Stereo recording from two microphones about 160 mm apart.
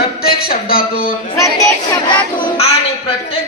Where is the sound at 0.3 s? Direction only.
70° left (ahead or behind).